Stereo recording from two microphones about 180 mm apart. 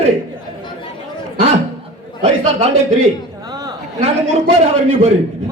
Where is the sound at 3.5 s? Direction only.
20° right (ahead or behind).